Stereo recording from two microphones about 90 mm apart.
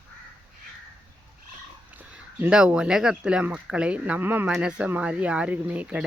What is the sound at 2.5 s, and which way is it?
Speech, 10° right (ahead or behind).